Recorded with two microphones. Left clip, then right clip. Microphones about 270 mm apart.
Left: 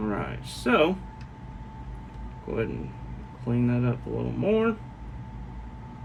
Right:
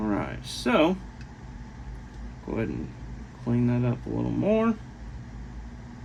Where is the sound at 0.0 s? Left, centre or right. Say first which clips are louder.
Right 1 dB; right.